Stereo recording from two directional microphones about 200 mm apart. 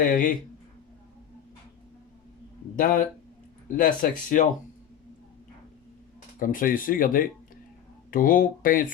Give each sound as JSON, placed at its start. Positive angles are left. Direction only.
{"t": 0.0, "sound": "speech", "side_deg": 45}
{"t": 2.7, "sound": "speech", "side_deg": 45}
{"t": 6.4, "sound": "speech", "side_deg": 45}